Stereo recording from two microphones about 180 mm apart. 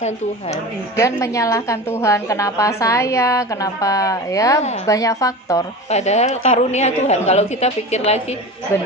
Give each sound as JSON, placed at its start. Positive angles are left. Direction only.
{"t": 0.0, "sound": "a woman's voice", "side_deg": 40}
{"t": 0.9, "sound": "a woman's voice", "side_deg": 15}
{"t": 5.9, "sound": "a woman's voice", "side_deg": 40}
{"t": 8.7, "sound": "a woman's voice", "side_deg": 15}